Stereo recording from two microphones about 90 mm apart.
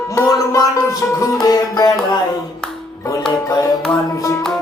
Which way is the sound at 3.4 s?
45° left (ahead or behind).